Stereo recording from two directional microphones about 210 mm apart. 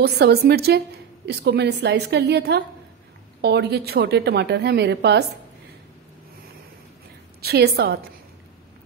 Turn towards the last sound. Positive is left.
turn(degrees=-50)  # may be behind; listen again after turning